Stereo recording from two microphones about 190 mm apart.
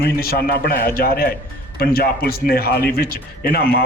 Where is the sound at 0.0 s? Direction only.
55° left (ahead or behind).